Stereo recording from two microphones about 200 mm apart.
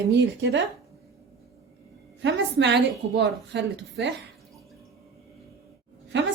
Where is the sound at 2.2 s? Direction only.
60° right (ahead or behind).